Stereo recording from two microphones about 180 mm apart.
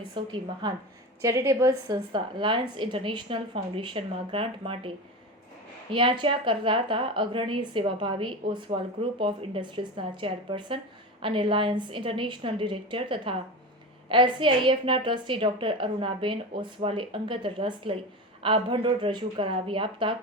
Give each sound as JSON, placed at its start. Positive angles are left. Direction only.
{"t": 0.3, "sound": "a woman's voice", "side_deg": -25}
{"t": 5.9, "sound": "a woman's voice", "side_deg": -25}